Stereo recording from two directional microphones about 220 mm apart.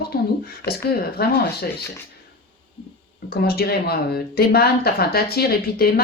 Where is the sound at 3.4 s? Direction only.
45° left (ahead or behind).